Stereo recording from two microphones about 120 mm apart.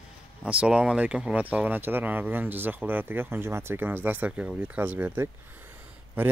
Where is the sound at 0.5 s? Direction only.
10° right (ahead or behind).